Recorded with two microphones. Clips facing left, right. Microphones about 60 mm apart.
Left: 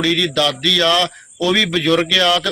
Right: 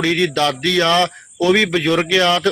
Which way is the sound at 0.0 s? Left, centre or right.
Right.